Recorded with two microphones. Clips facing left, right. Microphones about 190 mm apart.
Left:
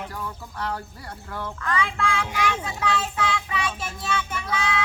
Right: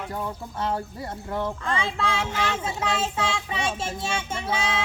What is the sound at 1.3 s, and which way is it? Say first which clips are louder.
Child singing: even; 25° right (ahead or behind).